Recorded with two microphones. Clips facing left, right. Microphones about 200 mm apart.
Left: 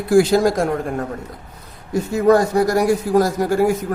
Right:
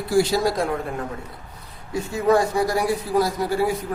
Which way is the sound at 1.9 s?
40° left (ahead or behind).